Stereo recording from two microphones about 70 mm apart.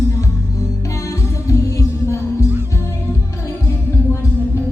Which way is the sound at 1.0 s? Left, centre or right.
Left.